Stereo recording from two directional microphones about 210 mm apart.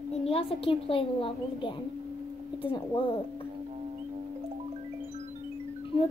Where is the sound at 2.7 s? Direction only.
20° left (ahead or behind).